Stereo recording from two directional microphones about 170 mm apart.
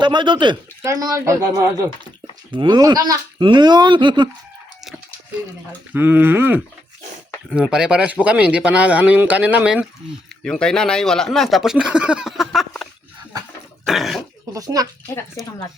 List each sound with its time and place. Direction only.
0.0 s speech: 25° right (ahead or behind)
5.9 s speech: 10° right (ahead or behind)
10.4 s speech: 5° left (ahead or behind)
13.8 s cough: centre (ahead or behind)
14.5 s speech: 20° right (ahead or behind)
15.1 s speech: 15° left (ahead or behind)